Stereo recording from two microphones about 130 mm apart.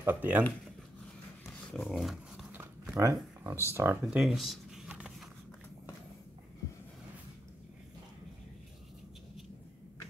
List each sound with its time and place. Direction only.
0.0 s speech: 15° right (ahead or behind)
1.4 s dog: centre (ahead or behind)
2.5 s a sound: 25° right (ahead or behind)
3.7 s speech: 20° right (ahead or behind)
4.0 s speech: 5° right (ahead or behind)